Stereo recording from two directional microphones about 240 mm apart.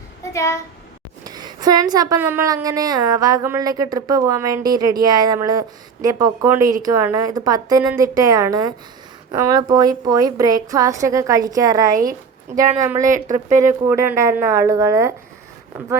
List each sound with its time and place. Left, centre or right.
0.3 s a woman's voice: centre
1.2 s a woman's voice: centre
11.9 s speech: right
12.8 s a woman's voice: centre